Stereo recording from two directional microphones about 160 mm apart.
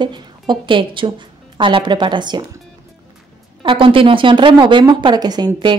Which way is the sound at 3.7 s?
35° right (ahead or behind).